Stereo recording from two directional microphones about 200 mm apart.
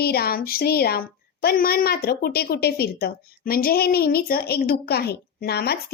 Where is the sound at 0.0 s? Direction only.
50° left (ahead or behind).